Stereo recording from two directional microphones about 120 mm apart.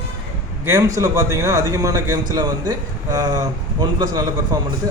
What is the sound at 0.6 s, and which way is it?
A man's voice, 30° right (ahead or behind).